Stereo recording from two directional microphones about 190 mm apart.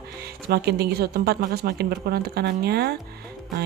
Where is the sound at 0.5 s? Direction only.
60° right (ahead or behind).